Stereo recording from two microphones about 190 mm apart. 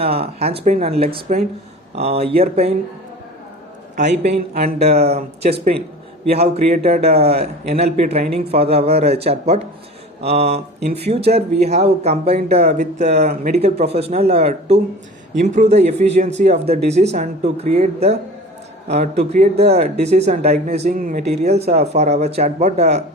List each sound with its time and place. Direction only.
0.0 s speech: 30° right (ahead or behind)
3.9 s speech: 40° right (ahead or behind)